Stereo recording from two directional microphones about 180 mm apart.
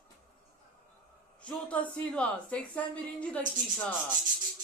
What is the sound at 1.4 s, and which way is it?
A woman's voice, 5° left (ahead or behind).